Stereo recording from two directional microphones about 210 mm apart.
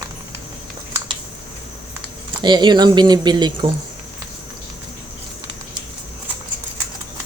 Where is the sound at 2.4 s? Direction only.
20° right (ahead or behind).